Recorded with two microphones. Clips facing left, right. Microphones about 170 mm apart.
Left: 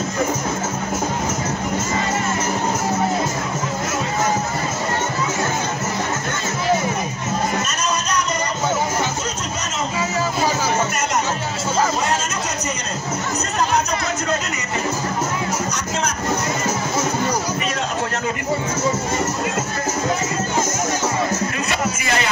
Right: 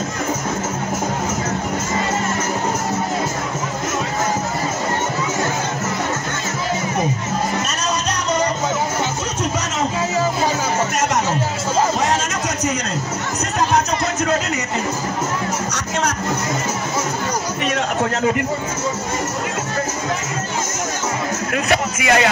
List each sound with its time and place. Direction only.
21.6 s music: 75° right (ahead or behind)